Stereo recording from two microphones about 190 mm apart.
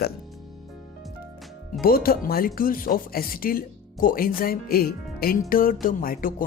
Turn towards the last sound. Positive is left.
turn(degrees=45)  # may be behind; listen again after turning